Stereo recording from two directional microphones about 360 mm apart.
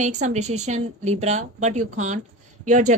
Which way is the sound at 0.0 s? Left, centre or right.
Centre.